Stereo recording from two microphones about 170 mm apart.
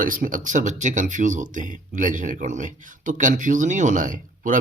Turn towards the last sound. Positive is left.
turn(degrees=-50)  # may be behind; listen again after turning